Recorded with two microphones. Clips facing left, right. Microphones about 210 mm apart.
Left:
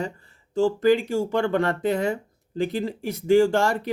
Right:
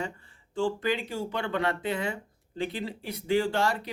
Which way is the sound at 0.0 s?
40° left (ahead or behind).